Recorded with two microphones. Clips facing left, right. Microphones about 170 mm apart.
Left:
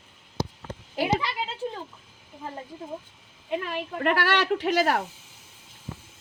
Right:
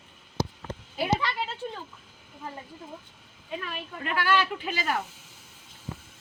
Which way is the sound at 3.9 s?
70° left (ahead or behind).